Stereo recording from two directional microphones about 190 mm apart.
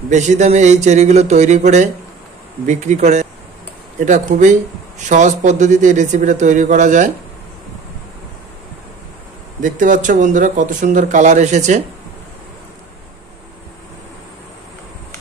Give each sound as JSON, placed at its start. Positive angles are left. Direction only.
{"t": 0.1, "sound": "speech", "side_deg": -40}
{"t": 9.6, "sound": "speech", "side_deg": -45}